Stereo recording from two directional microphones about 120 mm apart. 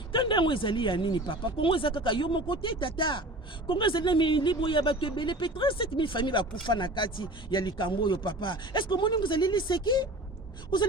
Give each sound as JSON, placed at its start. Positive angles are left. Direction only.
{"t": 0.1, "sound": "speech", "side_deg": 40}